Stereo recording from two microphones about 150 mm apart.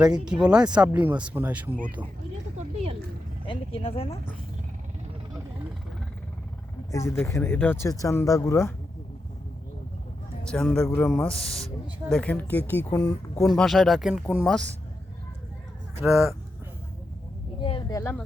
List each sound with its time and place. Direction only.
0.0 s speech: 5° right (ahead or behind)
3.4 s speech: 35° left (ahead or behind)
6.9 s speech: 20° left (ahead or behind)
10.5 s speech: 5° left (ahead or behind)
13.5 s speech: centre (ahead or behind)
16.0 s speech: 10° right (ahead or behind)
17.6 s a sound: 35° left (ahead or behind)
17.9 s speech: 15° left (ahead or behind)